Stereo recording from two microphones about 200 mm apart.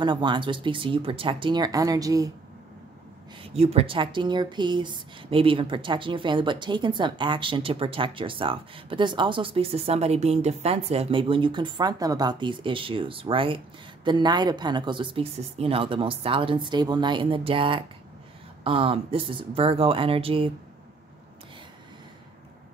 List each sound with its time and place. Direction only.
0.0 s speech: 25° right (ahead or behind)
3.5 s speech: 30° right (ahead or behind)